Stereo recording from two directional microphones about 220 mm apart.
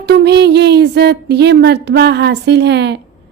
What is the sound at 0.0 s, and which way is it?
Speech, 50° right (ahead or behind).